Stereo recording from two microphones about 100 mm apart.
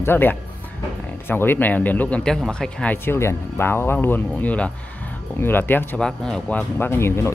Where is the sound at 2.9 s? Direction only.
25° left (ahead or behind).